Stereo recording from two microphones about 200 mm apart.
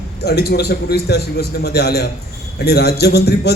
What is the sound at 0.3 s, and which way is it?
A man's voice, 55° left (ahead or behind).